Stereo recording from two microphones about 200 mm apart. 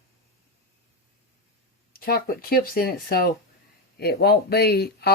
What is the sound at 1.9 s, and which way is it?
Speech, 45° left (ahead or behind).